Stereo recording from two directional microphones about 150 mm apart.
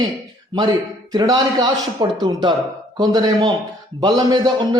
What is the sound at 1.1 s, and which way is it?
A man's voice, 25° right (ahead or behind).